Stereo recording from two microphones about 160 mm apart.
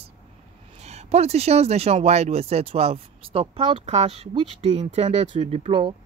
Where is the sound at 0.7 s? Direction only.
45° right (ahead or behind).